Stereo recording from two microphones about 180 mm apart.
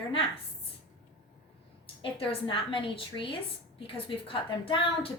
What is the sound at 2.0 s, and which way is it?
A woman's voice, 30° left (ahead or behind).